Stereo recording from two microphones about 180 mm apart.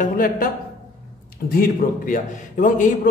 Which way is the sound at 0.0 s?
50° left (ahead or behind).